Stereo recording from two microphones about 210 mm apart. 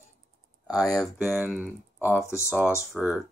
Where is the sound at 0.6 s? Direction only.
15° left (ahead or behind).